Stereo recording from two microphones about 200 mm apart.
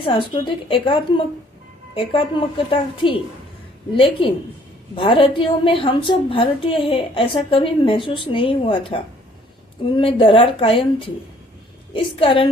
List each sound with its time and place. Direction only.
0.0 s a woman's voice: 25° left (ahead or behind)
2.6 s a woman's voice: 25° left (ahead or behind)